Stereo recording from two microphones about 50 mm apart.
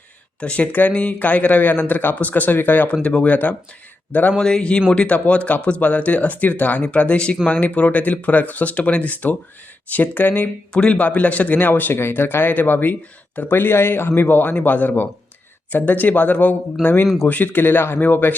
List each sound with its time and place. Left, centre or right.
0.3 s speech: left
4.4 s a man's voice: centre; by 10.5 s left
10.7 s speech: left